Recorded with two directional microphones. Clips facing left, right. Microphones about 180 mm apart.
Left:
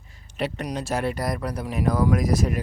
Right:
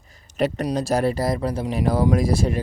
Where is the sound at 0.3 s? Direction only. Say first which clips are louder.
Right 6 dB; 40° right (ahead or behind).